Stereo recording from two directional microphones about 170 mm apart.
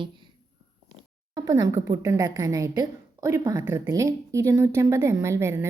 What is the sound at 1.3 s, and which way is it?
A woman's voice, 20° right (ahead or behind).